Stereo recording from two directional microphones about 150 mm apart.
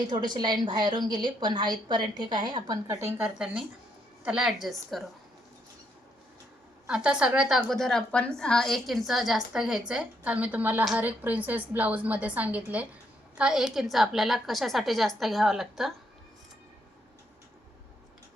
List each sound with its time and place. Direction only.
0.1 s a woman's voice: 30° right (ahead or behind)
2.8 s a woman's voice: 15° right (ahead or behind); by 5.1 s centre (ahead or behind)
6.8 s a woman's voice: 5° right (ahead or behind)